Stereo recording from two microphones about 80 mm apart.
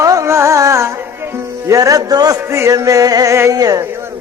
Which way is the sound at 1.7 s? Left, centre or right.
Right.